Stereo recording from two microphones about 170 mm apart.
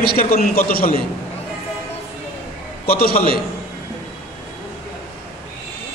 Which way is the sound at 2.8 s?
60° left (ahead or behind).